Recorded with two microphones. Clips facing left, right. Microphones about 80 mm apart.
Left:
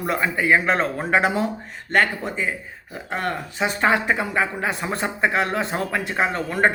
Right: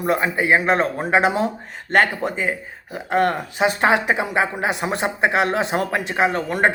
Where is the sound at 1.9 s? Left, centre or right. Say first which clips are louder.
Right 2 dB; right.